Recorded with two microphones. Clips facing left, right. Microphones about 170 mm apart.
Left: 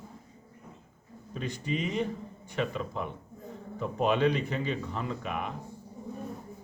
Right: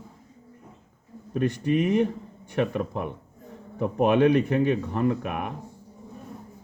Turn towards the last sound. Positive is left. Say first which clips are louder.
# right 8 dB
turn(degrees=-60)  # may be behind; listen again after turning